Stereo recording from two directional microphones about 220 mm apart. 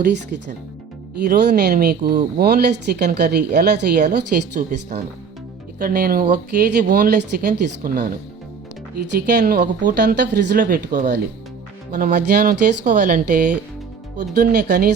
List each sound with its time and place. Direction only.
0.0 s speech: 45° right (ahead or behind)
5.8 s speech: 40° right (ahead or behind)